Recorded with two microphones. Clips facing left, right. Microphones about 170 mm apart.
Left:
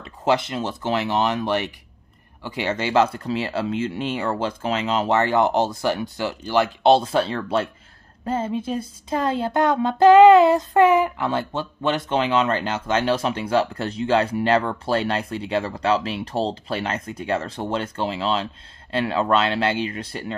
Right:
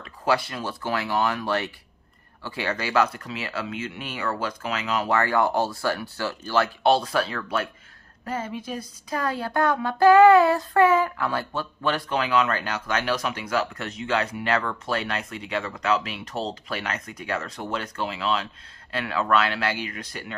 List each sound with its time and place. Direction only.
0.0 s speech: 20° left (ahead or behind)